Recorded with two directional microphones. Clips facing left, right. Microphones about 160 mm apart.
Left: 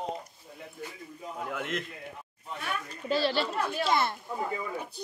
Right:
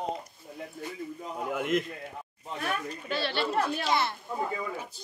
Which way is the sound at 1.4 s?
10° right (ahead or behind).